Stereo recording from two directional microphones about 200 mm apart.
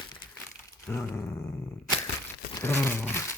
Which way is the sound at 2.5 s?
10° left (ahead or behind).